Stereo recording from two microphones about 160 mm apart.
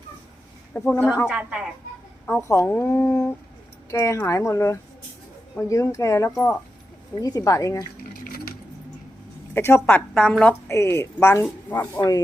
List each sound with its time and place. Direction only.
0.7 s speech: 10° left (ahead or behind)
1.3 s a woman's voice: 10° right (ahead or behind)
2.2 s speech: 10° left (ahead or behind)
7.2 s a woman's voice: 20° left (ahead or behind)
8.1 s dishes: 65° left (ahead or behind)
9.6 s speech: 15° left (ahead or behind)
11.9 s a woman's voice: 25° left (ahead or behind)